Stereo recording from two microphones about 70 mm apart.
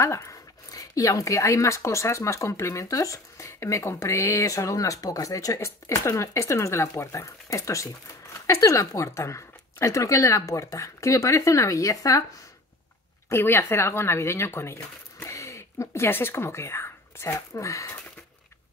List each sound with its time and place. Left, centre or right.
0.0 s speech: left
13.3 s speech: left